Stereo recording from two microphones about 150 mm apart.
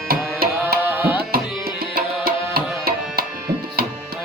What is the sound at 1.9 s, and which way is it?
Tabla, 90° right.